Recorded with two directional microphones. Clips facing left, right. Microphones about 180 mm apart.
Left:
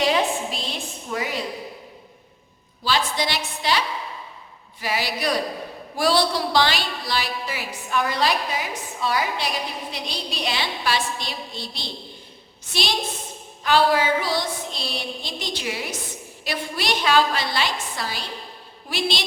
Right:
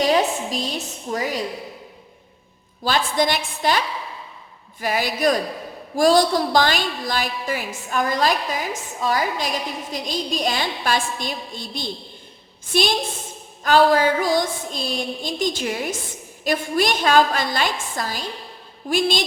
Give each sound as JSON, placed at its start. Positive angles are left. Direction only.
{"t": 0.0, "sound": "a sound", "side_deg": -40}
{"t": 1.1, "sound": "a woman's voice", "side_deg": -40}
{"t": 2.8, "sound": "a woman's voice", "side_deg": -50}
{"t": 13.7, "sound": "a woman's voice", "side_deg": -45}